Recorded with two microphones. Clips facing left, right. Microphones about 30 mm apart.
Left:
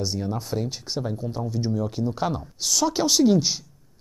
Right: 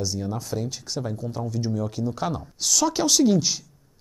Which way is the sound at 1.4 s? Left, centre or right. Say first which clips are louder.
Left 1 dB; centre.